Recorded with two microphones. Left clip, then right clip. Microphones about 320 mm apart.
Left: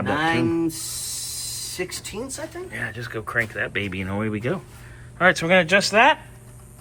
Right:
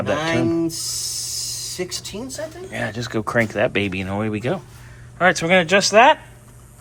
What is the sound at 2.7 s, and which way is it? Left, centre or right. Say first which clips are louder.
Speech: right 6 dB; centre.